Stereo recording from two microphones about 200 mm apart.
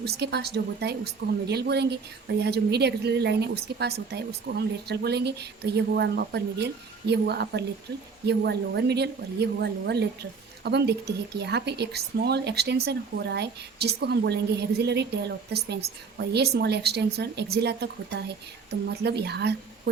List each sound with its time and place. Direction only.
0.0 s a woman's voice: 55° right (ahead or behind)